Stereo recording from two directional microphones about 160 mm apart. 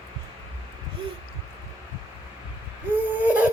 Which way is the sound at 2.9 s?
10° right (ahead or behind).